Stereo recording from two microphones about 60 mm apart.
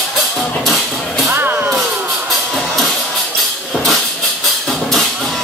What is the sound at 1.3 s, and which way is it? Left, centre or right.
Vehicle, right.